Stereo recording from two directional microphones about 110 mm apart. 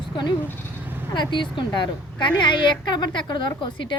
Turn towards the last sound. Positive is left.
turn(degrees=45)  # may be behind; listen again after turning